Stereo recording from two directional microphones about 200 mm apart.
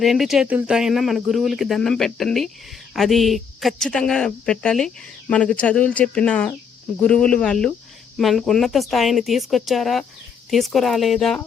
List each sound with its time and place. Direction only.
0.0 s speech: centre (ahead or behind)